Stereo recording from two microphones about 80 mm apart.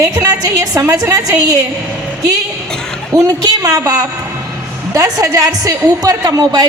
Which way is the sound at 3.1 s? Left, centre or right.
Right.